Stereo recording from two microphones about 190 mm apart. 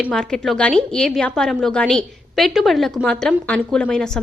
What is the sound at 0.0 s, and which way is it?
A woman's voice, 5° left (ahead or behind).